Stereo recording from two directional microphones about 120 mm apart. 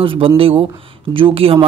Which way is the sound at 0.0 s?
45° right (ahead or behind).